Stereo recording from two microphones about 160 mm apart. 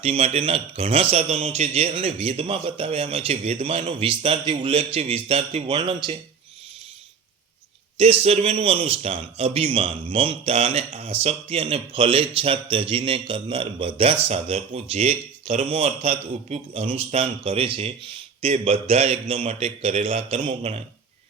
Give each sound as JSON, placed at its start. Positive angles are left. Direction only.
{"t": 0.0, "sound": "speech", "side_deg": -40}
{"t": 5.6, "sound": "a man's voice", "side_deg": -30}
{"t": 7.9, "sound": "speech", "side_deg": -35}